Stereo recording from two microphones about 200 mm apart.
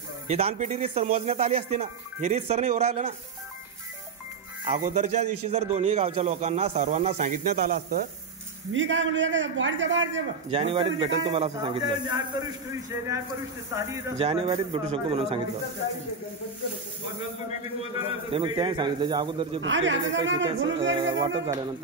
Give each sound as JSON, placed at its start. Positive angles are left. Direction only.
{"t": 0.3, "sound": "a man's voice", "side_deg": -30}
{"t": 4.7, "sound": "a man's voice", "side_deg": -35}
{"t": 8.7, "sound": "a man's voice", "side_deg": -70}
{"t": 10.5, "sound": "speech", "side_deg": -30}
{"t": 13.7, "sound": "speech", "side_deg": -15}
{"t": 14.1, "sound": "speech", "side_deg": -30}
{"t": 18.3, "sound": "speech", "side_deg": -25}
{"t": 19.6, "sound": "a man's voice", "side_deg": -70}
{"t": 21.0, "sound": "speech", "side_deg": -15}